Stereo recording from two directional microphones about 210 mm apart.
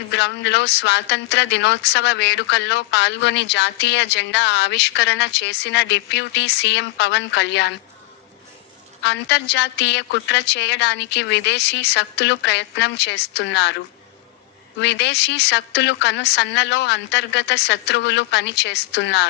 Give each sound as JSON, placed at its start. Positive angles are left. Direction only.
{"t": 0.1, "sound": "speech", "side_deg": 55}
{"t": 9.0, "sound": "speech", "side_deg": 55}
{"t": 14.8, "sound": "speech", "side_deg": 55}